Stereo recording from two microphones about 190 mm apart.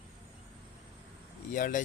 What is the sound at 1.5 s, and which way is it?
Speech, 45° left (ahead or behind).